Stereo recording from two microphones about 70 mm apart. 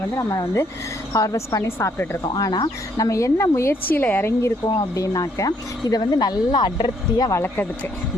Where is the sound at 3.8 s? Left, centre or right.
Left.